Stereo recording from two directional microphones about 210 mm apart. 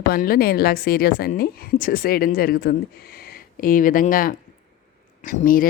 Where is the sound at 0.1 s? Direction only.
45° left (ahead or behind).